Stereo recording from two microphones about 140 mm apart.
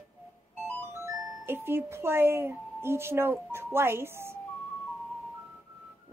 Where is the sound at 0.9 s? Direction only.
20° right (ahead or behind).